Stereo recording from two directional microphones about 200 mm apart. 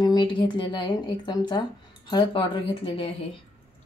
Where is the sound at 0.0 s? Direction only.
20° left (ahead or behind).